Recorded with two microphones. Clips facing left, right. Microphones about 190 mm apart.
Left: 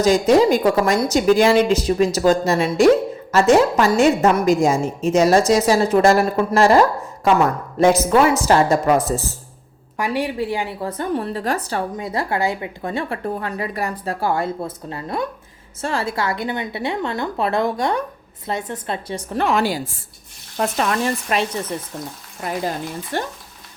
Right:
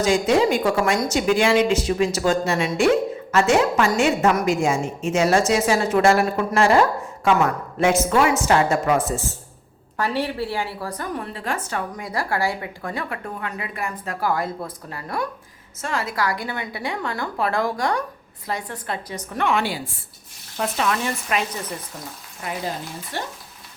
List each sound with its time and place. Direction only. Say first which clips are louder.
0.0 s a woman's voice: left 4 dB; 40° left (ahead or behind)
10.0 s a woman's voice: left 2 dB; 15° left (ahead or behind); by 21.4 s 40° left (ahead or behind)
23.1 s speech: left 5 dB; 50° left (ahead or behind)